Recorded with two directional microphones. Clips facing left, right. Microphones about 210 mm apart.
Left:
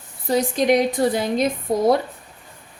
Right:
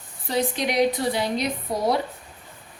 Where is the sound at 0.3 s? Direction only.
45° left (ahead or behind).